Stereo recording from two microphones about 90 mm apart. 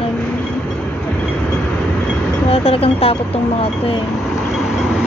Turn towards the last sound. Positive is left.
turn(degrees=90)